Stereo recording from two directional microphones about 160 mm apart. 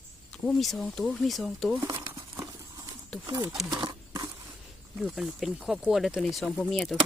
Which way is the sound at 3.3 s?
25° right (ahead or behind).